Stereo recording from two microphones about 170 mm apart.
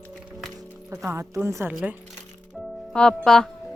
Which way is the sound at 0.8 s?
15° right (ahead or behind).